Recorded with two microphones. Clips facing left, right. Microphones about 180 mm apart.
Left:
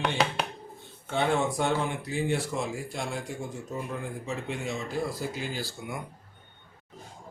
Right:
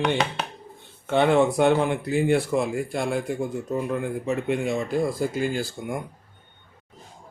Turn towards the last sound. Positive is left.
turn(degrees=-50)  # may be behind; listen again after turning